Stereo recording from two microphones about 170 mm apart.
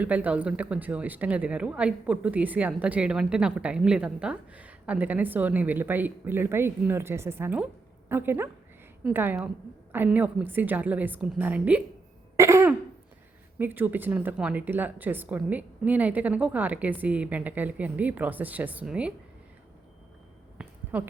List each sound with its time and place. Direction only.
0.0 s speech: 10° right (ahead or behind)
12.4 s throat clearing: 15° right (ahead or behind)
13.6 s speech: 10° right (ahead or behind)
20.6 s a sound: 10° right (ahead or behind)